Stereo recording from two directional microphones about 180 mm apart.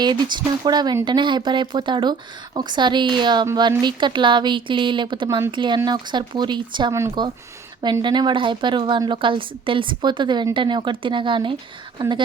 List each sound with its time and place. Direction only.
0.0 s a woman's voice: 25° right (ahead or behind)